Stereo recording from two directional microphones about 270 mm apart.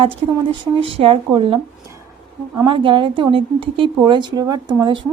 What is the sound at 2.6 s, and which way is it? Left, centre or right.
A woman's voice, centre.